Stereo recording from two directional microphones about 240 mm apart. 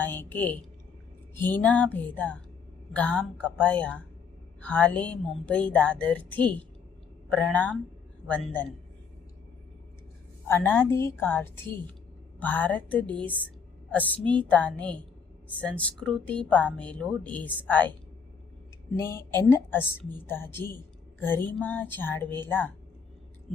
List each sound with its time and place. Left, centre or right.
0.0 s a woman's voice: centre
10.5 s speech: centre
18.9 s speech: centre